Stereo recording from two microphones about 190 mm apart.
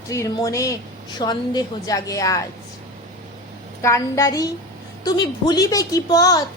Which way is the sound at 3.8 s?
15° left (ahead or behind).